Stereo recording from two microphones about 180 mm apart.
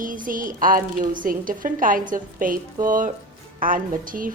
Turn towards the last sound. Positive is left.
turn(degrees=-50)  # may be behind; listen again after turning